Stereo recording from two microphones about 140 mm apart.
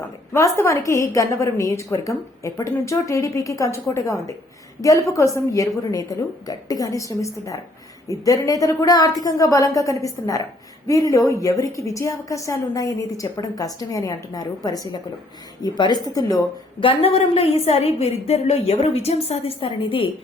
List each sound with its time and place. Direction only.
0.3 s a woman's voice: 20° left (ahead or behind)
16.8 s a woman's voice: 40° left (ahead or behind)